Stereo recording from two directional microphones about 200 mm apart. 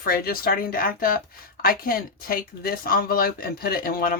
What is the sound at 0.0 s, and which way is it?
Speech, 50° left (ahead or behind).